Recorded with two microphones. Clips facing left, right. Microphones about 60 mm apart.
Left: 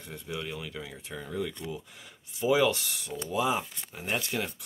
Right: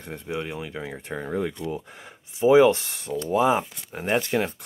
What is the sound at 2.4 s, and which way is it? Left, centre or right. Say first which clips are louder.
Speech: right 9 dB; right.